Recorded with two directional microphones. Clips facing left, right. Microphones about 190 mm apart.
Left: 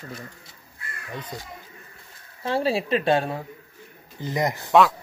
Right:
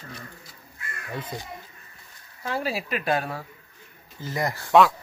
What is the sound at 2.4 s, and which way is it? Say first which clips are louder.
Speech: left 5 dB; 30° left (ahead or behind).